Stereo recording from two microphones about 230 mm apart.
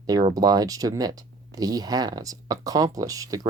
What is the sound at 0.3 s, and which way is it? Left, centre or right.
Speech, centre.